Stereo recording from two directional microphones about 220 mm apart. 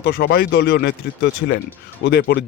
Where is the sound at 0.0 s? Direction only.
45° left (ahead or behind).